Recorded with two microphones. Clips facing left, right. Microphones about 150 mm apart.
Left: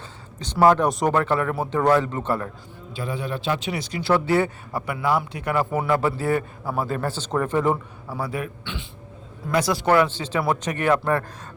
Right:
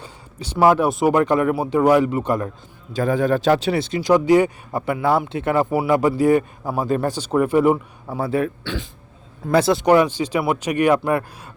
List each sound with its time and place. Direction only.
0.0 s speech: 10° right (ahead or behind)
1.1 s speech: 15° right (ahead or behind)
2.9 s speech: 45° right (ahead or behind); by 4.8 s 15° right (ahead or behind)
4.9 s speech: 25° right (ahead or behind)
5.7 s speech: 15° right (ahead or behind)
8.0 s speech: 25° right (ahead or behind)
9.8 s speech: 15° right (ahead or behind)